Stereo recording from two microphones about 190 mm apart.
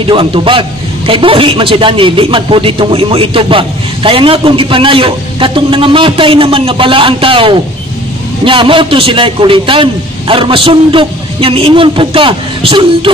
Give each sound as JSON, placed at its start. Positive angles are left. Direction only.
{"t": 0.0, "sound": "a man's voice", "side_deg": -25}